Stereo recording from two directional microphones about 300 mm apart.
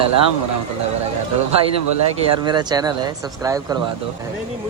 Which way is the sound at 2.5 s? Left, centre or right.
Centre.